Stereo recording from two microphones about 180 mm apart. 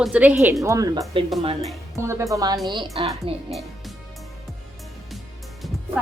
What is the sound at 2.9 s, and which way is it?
Speech, 30° right (ahead or behind).